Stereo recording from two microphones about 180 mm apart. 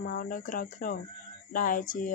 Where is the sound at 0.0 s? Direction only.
50° left (ahead or behind).